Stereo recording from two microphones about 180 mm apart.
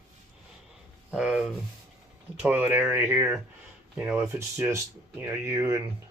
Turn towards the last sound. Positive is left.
turn(degrees=-15)  # may be behind; listen again after turning